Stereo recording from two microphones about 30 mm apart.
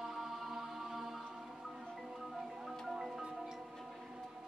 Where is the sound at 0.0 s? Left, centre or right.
Centre.